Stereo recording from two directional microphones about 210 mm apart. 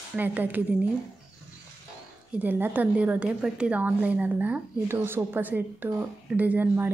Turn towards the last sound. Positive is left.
turn(degrees=-10)  # may be behind; listen again after turning